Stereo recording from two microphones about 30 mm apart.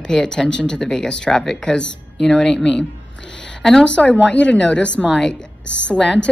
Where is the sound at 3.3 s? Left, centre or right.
Left.